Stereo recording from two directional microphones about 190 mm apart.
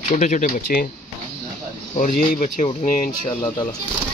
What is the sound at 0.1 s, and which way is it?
Speech, 40° left (ahead or behind).